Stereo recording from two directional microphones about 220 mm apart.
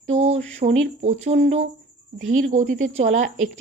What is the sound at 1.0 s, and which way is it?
A woman's voice, 30° right (ahead or behind).